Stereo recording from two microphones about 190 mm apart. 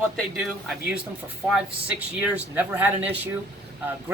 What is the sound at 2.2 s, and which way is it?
Speech, 10° right (ahead or behind).